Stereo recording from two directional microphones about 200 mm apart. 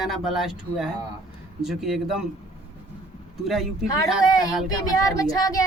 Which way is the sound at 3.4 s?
Centre (ahead or behind).